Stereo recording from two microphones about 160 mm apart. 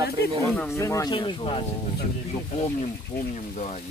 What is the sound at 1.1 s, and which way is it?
Speech, 30° left (ahead or behind).